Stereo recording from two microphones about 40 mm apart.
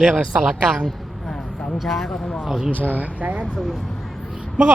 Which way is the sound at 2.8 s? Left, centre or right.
Right.